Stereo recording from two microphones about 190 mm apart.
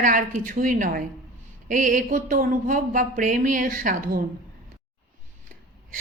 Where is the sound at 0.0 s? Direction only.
45° right (ahead or behind).